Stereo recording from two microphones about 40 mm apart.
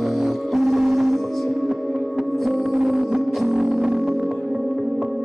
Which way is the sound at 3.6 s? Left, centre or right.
Centre.